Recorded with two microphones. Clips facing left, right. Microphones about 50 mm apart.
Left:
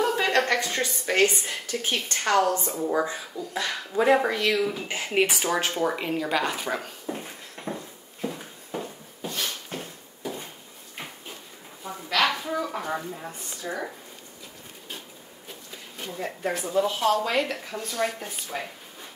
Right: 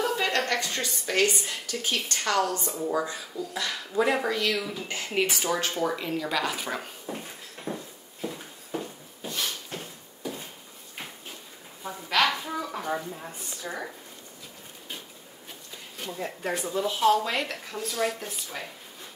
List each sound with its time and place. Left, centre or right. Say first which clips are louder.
0.0 s a sound: left 3 dB; left
0.5 s a woman's voice: left 3 dB; left
6.4 s speech: left 2 dB; centre
7.1 s a sound: left 3 dB; centre
12.3 s speech: left 2 dB; centre
16.5 s speech: left 5 dB; centre
16.8 s speech: right 3 dB; centre